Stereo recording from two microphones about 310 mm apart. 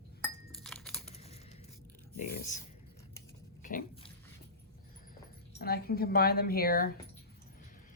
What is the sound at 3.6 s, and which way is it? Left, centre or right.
Dog, left.